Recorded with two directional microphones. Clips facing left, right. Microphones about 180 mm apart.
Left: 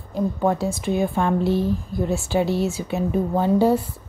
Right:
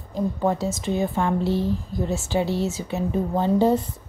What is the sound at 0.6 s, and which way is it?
A woman's voice, 15° left (ahead or behind).